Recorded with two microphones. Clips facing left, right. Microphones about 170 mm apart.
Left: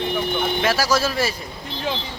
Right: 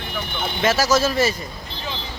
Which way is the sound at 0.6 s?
10° left (ahead or behind).